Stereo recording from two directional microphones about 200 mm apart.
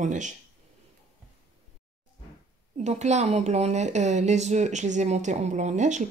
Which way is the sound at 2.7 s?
35° right (ahead or behind).